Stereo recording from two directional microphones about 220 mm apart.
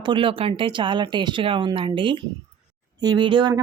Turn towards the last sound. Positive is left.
turn(degrees=-20)  # may be behind; listen again after turning